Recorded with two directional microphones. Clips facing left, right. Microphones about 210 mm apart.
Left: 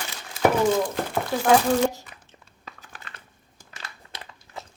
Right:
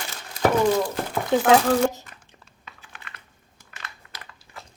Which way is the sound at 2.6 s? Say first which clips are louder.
Left 2 dB; 40° left (ahead or behind).